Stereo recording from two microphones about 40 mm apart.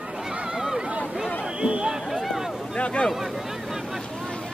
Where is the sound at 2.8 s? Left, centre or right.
Left.